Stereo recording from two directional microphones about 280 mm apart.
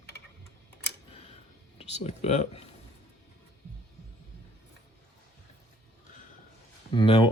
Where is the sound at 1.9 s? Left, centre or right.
Left.